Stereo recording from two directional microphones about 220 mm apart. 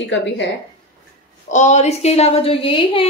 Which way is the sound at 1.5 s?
30° left (ahead or behind).